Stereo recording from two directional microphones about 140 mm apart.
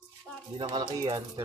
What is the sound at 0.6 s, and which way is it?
Speech, 30° right (ahead or behind).